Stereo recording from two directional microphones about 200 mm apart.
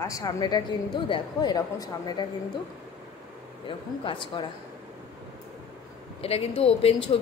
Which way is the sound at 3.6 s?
25° left (ahead or behind).